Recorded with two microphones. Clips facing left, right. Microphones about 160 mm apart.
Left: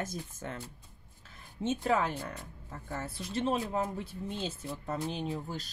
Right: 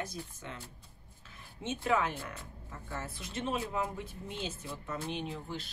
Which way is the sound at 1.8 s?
35° left (ahead or behind).